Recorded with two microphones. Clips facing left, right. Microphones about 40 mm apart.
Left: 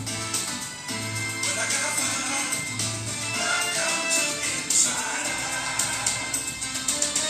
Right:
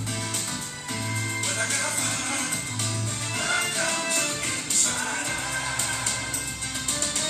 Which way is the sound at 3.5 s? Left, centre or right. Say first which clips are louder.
Even; right.